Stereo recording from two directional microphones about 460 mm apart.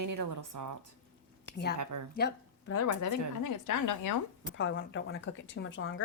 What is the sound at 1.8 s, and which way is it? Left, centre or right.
Speech, right.